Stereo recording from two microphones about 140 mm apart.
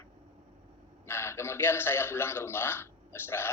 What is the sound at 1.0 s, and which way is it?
A man's voice, 20° left (ahead or behind).